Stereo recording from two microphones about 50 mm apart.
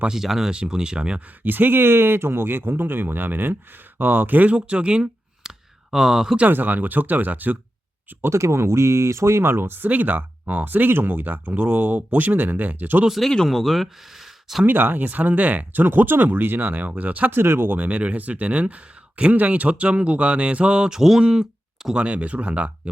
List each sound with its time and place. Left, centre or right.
0.1 s speech: centre
1.5 s speech: right
5.5 s a sound: centre
5.9 s speech: centre
6.5 s speech: right
8.3 s speech: right
9.9 s speech: right
13.1 s speech: centre
14.7 s speech: right
17.3 s speech: right
17.7 s speech: right